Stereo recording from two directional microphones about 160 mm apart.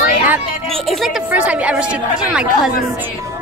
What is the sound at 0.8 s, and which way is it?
A woman's voice, centre (ahead or behind).